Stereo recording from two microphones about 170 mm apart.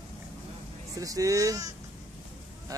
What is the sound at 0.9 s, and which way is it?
Speech, 20° right (ahead or behind).